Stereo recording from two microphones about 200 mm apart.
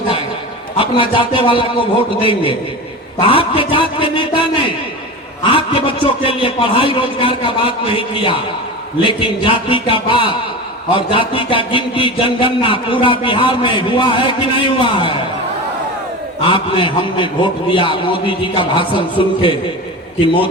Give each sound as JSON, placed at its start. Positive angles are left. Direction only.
{"t": 0.8, "sound": "a man's voice", "side_deg": 25}
{"t": 3.2, "sound": "a sound", "side_deg": 25}
{"t": 5.4, "sound": "a man's voice", "side_deg": 25}
{"t": 16.5, "sound": "a man's voice", "side_deg": 25}